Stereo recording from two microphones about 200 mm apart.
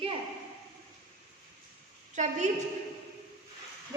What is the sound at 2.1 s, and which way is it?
Speech, 35° right (ahead or behind).